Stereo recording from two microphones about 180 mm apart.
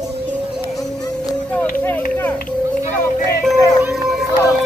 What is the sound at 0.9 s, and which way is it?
Music, 5° left (ahead or behind).